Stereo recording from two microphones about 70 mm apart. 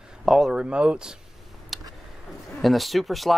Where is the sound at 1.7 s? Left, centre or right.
Centre.